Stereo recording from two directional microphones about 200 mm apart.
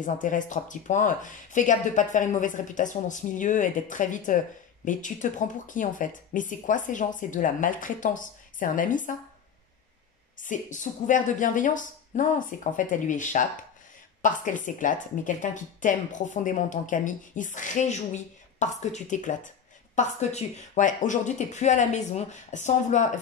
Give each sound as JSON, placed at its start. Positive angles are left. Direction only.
{"t": 0.0, "sound": "speech", "side_deg": 40}
{"t": 10.3, "sound": "speech", "side_deg": 40}